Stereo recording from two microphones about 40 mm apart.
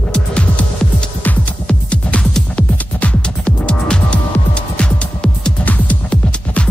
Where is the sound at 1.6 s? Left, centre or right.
Left.